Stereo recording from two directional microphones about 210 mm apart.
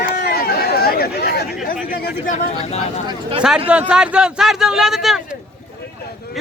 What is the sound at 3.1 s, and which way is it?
Speech, 20° right (ahead or behind).